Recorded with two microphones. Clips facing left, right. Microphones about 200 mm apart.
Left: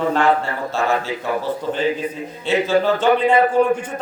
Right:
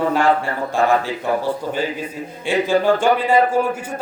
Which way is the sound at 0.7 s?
15° right (ahead or behind).